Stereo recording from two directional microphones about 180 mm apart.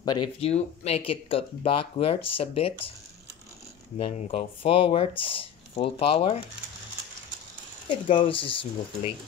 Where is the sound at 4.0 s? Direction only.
40° left (ahead or behind).